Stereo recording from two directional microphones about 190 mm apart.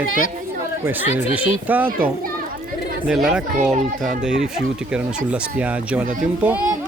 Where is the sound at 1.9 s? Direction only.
50° right (ahead or behind).